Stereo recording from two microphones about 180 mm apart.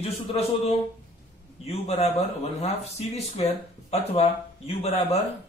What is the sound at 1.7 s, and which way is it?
Speech, 35° left (ahead or behind).